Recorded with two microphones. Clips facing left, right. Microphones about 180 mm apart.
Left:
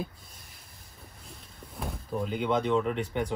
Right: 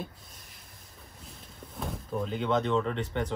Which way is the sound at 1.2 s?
Centre (ahead or behind).